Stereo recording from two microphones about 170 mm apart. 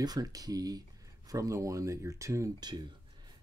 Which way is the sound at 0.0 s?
20° right (ahead or behind).